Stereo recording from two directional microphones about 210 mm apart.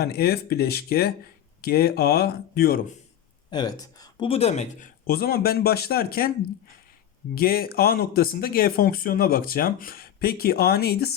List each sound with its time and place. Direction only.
0.0 s speech: 50° left (ahead or behind)
3.5 s speech: 20° left (ahead or behind)
5.0 s speech: 45° left (ahead or behind)
7.3 s speech: 45° left (ahead or behind)